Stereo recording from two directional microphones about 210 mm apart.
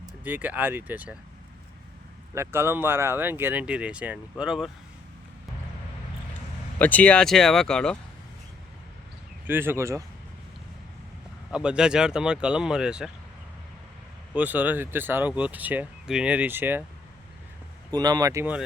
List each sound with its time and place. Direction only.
0.3 s speech: 10° right (ahead or behind)
2.3 s speech: 10° right (ahead or behind)
6.7 s speech: 5° left (ahead or behind)
9.5 s speech: 10° right (ahead or behind)
11.5 s speech: 5° right (ahead or behind)
14.3 s speech: 5° right (ahead or behind)
17.9 s speech: 20° right (ahead or behind)